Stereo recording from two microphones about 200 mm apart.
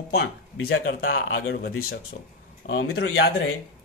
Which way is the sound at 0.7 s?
50° left (ahead or behind).